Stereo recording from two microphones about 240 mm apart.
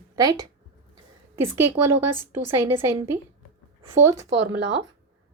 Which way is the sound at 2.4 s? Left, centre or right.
Centre.